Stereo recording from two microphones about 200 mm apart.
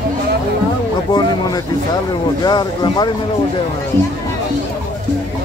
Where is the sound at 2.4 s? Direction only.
20° left (ahead or behind).